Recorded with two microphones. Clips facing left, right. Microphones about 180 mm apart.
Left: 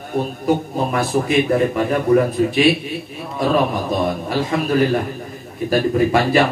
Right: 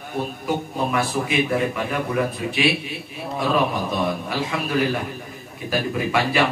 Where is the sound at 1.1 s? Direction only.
40° left (ahead or behind).